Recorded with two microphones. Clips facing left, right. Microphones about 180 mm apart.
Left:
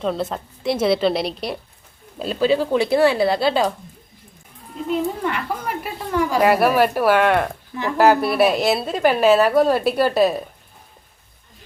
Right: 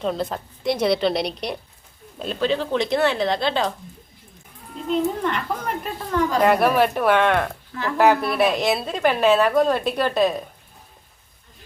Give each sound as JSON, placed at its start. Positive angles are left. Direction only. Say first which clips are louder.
{"t": 0.0, "sound": "a woman's voice", "louder": "left 1 dB", "side_deg": 0}
{"t": 4.9, "sound": "a woman's voice", "louder": "even", "side_deg": 10}
{"t": 7.7, "sound": "speech", "louder": "left 2 dB", "side_deg": 15}
{"t": 7.9, "sound": "a woman's voice", "louder": "left 2 dB", "side_deg": 5}